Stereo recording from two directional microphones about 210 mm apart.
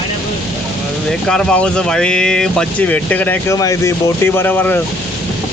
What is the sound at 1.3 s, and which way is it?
Speech, 5° left (ahead or behind).